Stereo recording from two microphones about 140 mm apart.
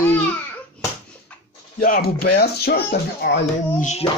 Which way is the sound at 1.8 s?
90° left.